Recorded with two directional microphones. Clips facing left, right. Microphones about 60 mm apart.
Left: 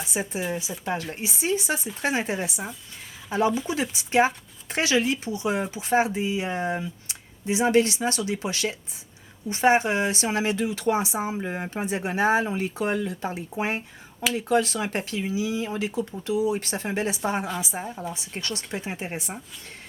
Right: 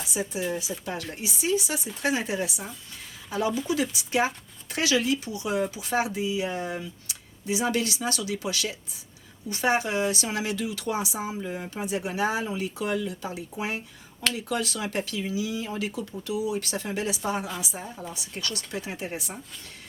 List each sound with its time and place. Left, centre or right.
0.1 s speech: left